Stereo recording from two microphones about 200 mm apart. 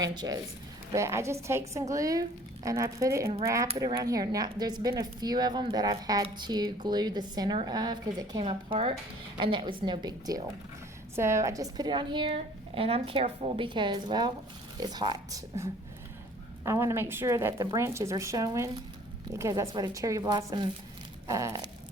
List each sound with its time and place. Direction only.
0.0 s a woman's voice: 20° right (ahead or behind)